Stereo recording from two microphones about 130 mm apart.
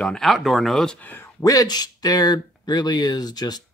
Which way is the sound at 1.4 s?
25° left (ahead or behind).